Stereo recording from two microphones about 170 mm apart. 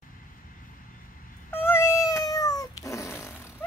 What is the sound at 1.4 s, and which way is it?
Cat, 15° left (ahead or behind).